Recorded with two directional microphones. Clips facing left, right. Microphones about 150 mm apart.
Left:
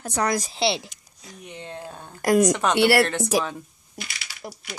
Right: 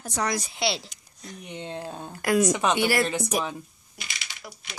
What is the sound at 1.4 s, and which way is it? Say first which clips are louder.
Speech: right 2 dB; 20° right (ahead or behind).